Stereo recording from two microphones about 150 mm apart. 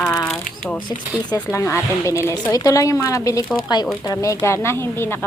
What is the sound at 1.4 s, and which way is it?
A woman's voice, 15° left (ahead or behind).